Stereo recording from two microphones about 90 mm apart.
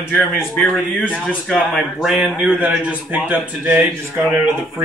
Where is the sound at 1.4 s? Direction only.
Centre (ahead or behind).